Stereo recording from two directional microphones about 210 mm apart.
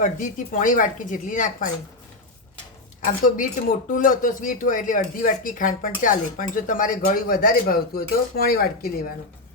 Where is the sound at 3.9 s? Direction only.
40° left (ahead or behind).